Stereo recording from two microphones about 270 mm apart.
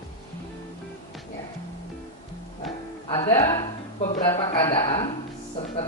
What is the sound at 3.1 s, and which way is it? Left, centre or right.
Music, centre.